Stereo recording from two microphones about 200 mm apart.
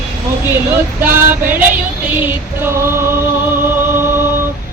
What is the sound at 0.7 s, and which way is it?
Female singing, 10° right (ahead or behind).